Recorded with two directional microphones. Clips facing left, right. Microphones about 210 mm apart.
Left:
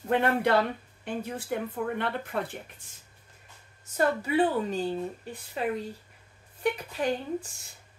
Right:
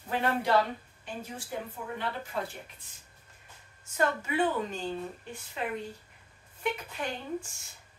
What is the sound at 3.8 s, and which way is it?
A woman's voice, 35° left (ahead or behind).